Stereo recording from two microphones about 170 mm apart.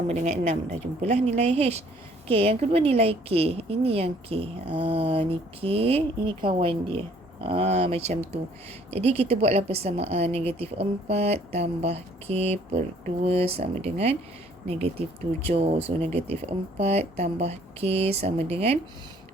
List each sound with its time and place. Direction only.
0.1 s a woman's voice: 40° right (ahead or behind)